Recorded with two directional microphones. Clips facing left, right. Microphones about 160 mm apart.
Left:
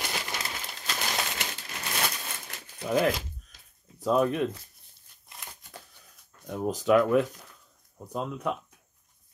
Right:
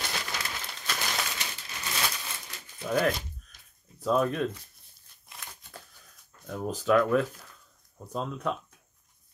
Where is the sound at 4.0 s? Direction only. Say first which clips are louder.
Left 2 dB; 20° left (ahead or behind).